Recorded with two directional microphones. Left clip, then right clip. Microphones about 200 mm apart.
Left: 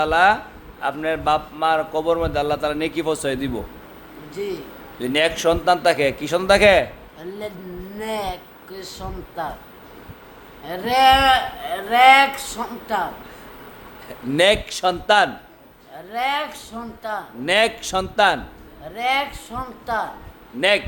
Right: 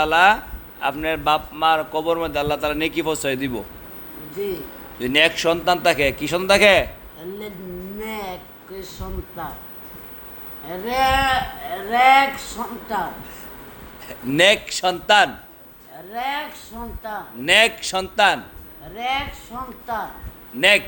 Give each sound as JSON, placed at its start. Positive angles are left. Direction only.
{"t": 0.0, "sound": "a man's voice", "side_deg": 5}
{"t": 4.9, "sound": "a man's voice", "side_deg": 10}
{"t": 8.0, "sound": "a man's voice", "side_deg": 15}
{"t": 10.7, "sound": "speech", "side_deg": 25}
{"t": 14.1, "sound": "a man's voice", "side_deg": 10}
{"t": 16.1, "sound": "speech", "side_deg": 25}
{"t": 17.4, "sound": "a man's voice", "side_deg": 10}